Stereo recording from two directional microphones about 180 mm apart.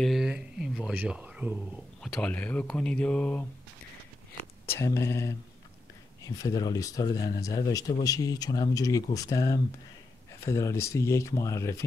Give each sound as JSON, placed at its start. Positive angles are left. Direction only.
{"t": 0.0, "sound": "speech", "side_deg": 0}
{"t": 2.2, "sound": "speech", "side_deg": 10}
{"t": 4.6, "sound": "speech", "side_deg": 15}